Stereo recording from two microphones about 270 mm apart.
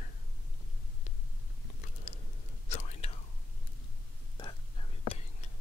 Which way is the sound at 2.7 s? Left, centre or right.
Left.